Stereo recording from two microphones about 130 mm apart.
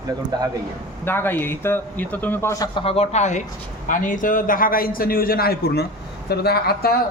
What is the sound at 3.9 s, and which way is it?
A man's voice, 85° left.